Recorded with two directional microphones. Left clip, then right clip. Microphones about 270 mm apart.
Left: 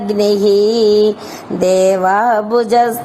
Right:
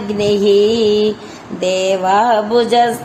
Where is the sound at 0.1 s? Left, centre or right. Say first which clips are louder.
Left 1 dB; left.